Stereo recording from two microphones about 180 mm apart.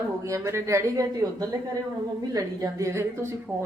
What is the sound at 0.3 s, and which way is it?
Speech, 15° right (ahead or behind).